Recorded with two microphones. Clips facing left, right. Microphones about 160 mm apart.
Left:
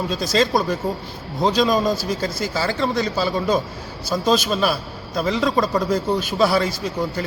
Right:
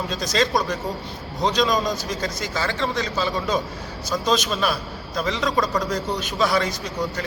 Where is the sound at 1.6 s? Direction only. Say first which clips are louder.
Left 3 dB; 30° left (ahead or behind).